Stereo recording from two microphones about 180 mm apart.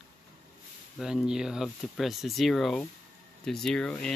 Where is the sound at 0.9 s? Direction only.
5° right (ahead or behind).